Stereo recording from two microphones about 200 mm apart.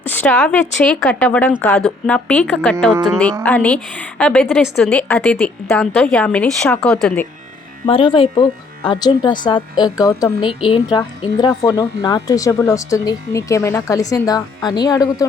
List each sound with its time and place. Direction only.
0.1 s a woman's voice: 10° left (ahead or behind)
7.9 s speech: 25° left (ahead or behind)